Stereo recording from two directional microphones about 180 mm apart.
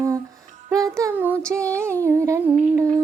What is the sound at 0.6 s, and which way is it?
Music, 20° right (ahead or behind).